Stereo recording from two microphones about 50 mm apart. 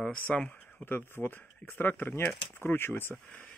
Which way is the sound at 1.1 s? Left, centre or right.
Left.